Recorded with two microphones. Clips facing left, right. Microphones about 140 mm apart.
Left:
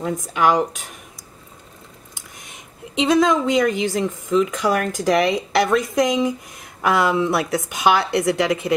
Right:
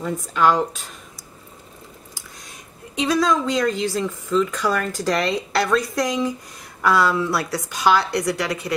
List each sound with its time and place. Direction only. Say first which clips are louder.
0.2 s speech: even; 15° left (ahead or behind)
2.1 s speech: even; 20° left (ahead or behind)